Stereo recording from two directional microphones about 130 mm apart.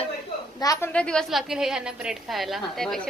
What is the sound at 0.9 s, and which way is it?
A woman's voice, 5° left (ahead or behind).